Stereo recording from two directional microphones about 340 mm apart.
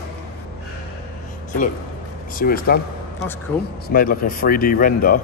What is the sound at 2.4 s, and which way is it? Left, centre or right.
Speech, left.